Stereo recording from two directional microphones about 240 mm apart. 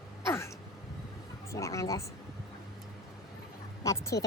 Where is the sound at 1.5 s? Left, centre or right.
Centre.